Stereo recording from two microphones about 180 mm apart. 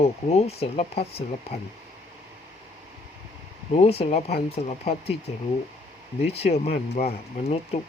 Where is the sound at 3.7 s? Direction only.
35° left (ahead or behind).